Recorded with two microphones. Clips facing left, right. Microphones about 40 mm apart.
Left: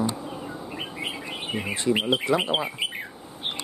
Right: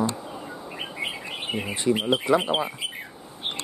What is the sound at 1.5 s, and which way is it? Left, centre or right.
Speech, centre.